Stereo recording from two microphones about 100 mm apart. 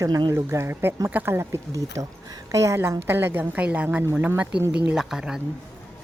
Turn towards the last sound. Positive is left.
turn(degrees=-5)  # may be behind; listen again after turning